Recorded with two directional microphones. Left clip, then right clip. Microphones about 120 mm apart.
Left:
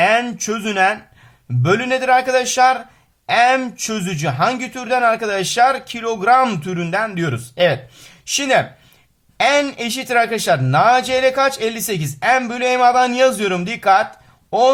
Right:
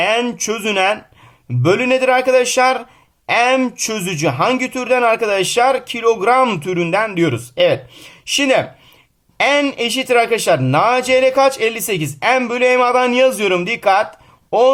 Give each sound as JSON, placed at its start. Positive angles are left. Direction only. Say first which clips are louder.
{"t": 0.0, "sound": "speech", "louder": "left 1 dB", "side_deg": -35}